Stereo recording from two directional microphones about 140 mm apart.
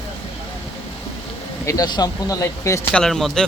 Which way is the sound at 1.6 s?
25° left (ahead or behind).